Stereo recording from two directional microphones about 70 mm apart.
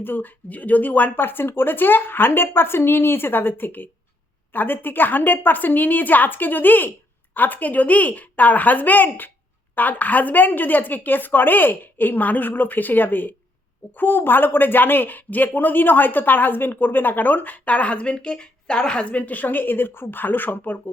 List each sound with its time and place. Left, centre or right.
0.0 s a woman's voice: left